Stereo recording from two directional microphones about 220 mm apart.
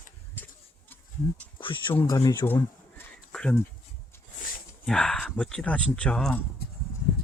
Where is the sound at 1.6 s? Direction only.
20° left (ahead or behind); by 3.6 s 5° left (ahead or behind).